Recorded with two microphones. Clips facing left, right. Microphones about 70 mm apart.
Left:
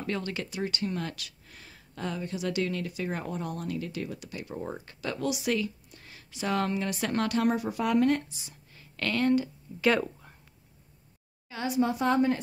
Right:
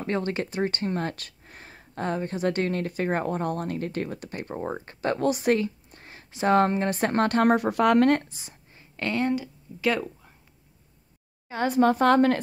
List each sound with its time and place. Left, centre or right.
0.0 s speech: right
8.3 s whispering: right
9.3 s a woman's voice: centre
11.4 s a woman's voice: right
11.8 s a woman's voice: right